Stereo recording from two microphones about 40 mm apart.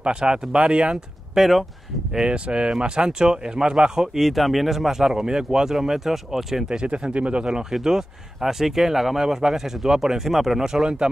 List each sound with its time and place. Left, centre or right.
0.0 s speech: right
1.3 s speech: centre
2.1 s speech: right
2.8 s speech: centre
4.2 s speech: centre
6.7 s speech: right
7.8 s speech: centre